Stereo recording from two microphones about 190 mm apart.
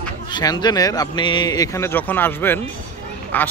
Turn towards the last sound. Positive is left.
turn(degrees=10)  # may be behind; listen again after turning